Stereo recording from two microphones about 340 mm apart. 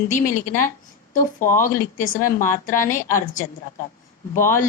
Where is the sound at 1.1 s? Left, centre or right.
Left.